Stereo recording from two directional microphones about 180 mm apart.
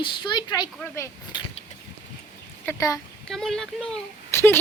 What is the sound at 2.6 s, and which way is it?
Speech, 20° left (ahead or behind).